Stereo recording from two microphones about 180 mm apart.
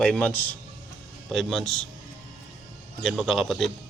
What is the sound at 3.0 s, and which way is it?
Speech, centre (ahead or behind).